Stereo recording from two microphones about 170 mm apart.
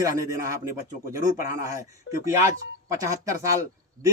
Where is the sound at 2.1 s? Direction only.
90° left.